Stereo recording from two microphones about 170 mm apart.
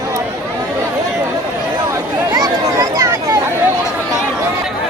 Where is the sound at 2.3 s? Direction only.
20° right (ahead or behind).